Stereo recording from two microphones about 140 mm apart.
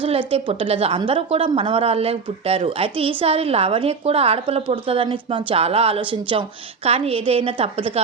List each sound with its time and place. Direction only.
0.0 s a woman's voice: 40° right (ahead or behind)